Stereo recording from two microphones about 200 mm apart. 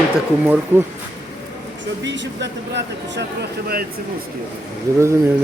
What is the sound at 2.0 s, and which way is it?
Speech, 60° right (ahead or behind).